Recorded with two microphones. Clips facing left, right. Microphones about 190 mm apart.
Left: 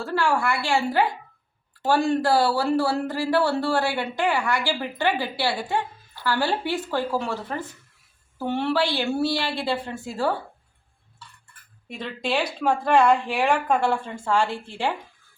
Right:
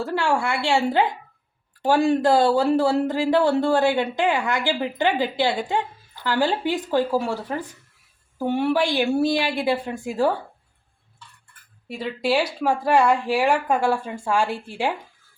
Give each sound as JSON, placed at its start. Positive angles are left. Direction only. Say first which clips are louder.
{"t": 0.0, "sound": "speech", "louder": "right 1 dB", "side_deg": -20}
{"t": 11.9, "sound": "speech", "louder": "right 4 dB", "side_deg": -5}